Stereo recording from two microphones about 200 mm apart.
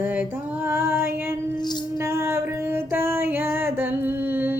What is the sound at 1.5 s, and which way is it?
Music, 20° left (ahead or behind).